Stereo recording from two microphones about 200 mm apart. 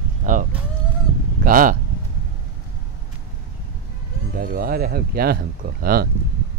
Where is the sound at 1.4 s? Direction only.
40° right (ahead or behind).